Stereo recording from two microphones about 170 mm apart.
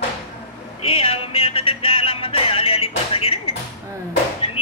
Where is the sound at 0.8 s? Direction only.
35° left (ahead or behind).